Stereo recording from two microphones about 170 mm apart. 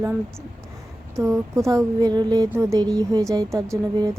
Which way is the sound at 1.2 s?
15° right (ahead or behind).